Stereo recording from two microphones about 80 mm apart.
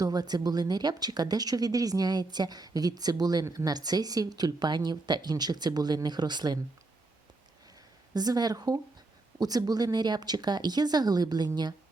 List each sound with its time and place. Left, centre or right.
0.0 s speech: right
8.1 s speech: right